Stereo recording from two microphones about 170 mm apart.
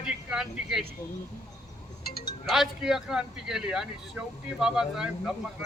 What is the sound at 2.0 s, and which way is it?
Music, 65° left (ahead or behind).